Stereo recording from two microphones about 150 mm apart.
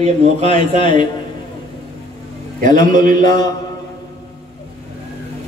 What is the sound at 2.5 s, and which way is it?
Speech, 60° right (ahead or behind).